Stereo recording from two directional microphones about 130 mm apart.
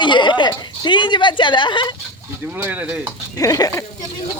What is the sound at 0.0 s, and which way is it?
A woman's voice, 35° left (ahead or behind).